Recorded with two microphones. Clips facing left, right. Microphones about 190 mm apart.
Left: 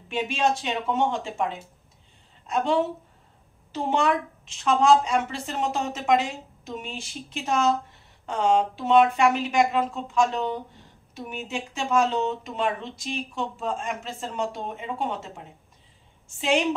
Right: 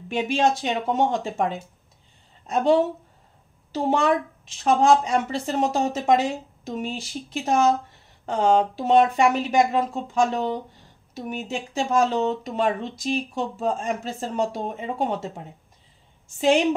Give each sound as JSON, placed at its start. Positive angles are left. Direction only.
{"t": 0.1, "sound": "speech", "side_deg": -40}